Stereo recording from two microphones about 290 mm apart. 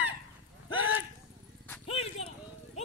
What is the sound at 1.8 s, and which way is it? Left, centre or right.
Clip-clop, left.